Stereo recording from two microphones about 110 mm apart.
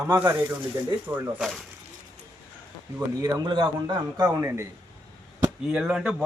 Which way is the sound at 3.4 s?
45° right (ahead or behind).